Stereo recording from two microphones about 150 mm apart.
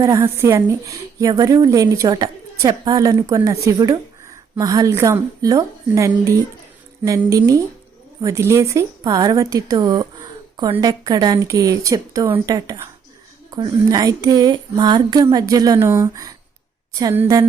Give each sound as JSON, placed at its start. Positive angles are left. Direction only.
{"t": 0.0, "sound": "speech", "side_deg": -25}